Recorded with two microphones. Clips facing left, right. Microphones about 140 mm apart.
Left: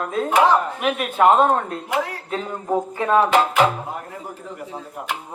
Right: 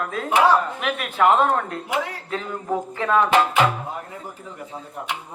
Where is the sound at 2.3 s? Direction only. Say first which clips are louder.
Even; 30° left (ahead or behind).